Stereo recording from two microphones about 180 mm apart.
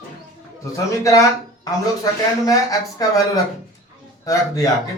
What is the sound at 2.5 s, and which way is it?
Speech, 20° left (ahead or behind).